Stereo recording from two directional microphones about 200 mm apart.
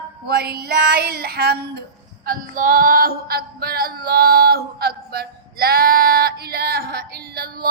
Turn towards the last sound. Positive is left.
turn(degrees=-50)  # may be behind; listen again after turning